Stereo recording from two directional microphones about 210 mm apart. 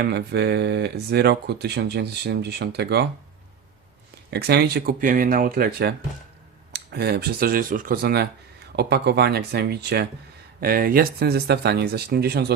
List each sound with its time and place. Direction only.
0.0 s speech: 55° right (ahead or behind)
4.3 s speech: 50° right (ahead or behind)